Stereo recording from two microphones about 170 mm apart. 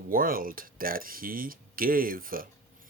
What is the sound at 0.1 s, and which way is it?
Speech, 55° right (ahead or behind).